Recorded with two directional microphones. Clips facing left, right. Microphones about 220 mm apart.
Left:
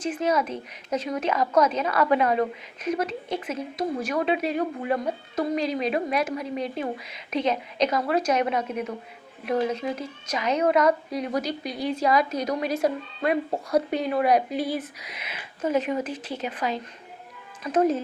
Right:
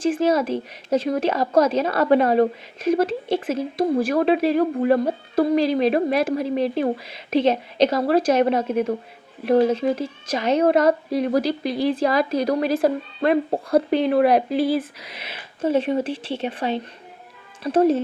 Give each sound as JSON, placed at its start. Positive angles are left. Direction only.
{"t": 0.2, "sound": "speech", "side_deg": -30}